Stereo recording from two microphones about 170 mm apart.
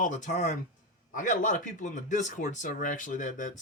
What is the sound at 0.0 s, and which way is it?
Speech, 45° left (ahead or behind).